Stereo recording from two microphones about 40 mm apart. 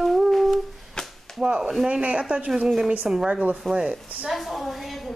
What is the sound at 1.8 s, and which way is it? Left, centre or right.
Speech, right.